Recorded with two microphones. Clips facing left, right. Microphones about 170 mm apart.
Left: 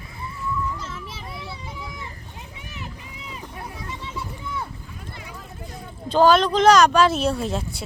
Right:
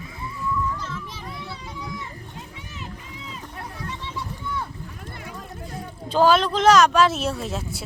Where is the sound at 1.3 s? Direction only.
20° left (ahead or behind).